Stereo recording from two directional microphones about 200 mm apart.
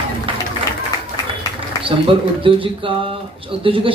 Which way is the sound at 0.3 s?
25° right (ahead or behind).